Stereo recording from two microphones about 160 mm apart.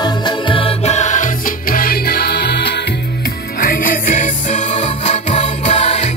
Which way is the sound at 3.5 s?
60° left (ahead or behind).